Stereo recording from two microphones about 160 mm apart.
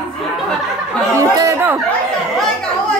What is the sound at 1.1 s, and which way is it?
Speech, 20° right (ahead or behind).